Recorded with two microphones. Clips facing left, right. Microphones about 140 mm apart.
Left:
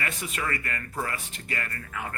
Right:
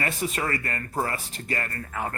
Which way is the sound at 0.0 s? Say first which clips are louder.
Right 4 dB; 35° right (ahead or behind).